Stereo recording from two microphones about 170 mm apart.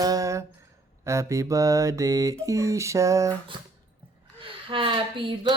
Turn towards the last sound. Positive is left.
turn(degrees=-30)  # may be behind; listen again after turning